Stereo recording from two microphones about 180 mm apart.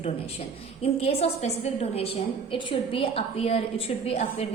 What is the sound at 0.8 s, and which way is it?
A woman's voice, 35° left (ahead or behind).